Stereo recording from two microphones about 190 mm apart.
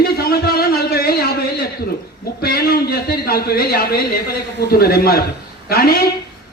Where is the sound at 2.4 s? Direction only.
55° left (ahead or behind).